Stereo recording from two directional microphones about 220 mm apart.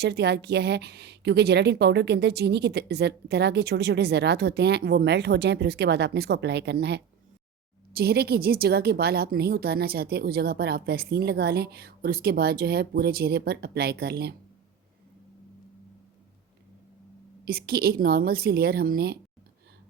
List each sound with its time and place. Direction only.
0.0 s a woman's voice: 50° right (ahead or behind)
17.4 s a woman's voice: 45° right (ahead or behind)